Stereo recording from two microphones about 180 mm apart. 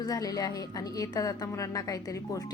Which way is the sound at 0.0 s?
20° left (ahead or behind).